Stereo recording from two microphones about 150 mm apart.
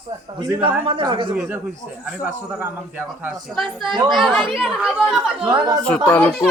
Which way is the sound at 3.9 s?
30° right (ahead or behind).